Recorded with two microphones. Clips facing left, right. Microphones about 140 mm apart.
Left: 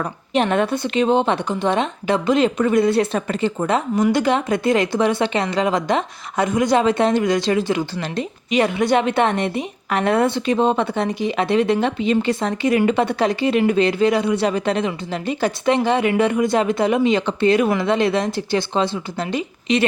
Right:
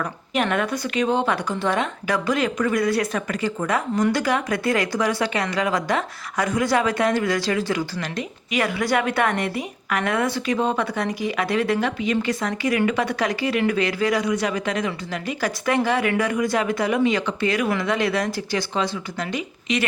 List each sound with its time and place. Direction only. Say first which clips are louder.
0.0 s a woman's voice: left 4 dB; 30° left (ahead or behind)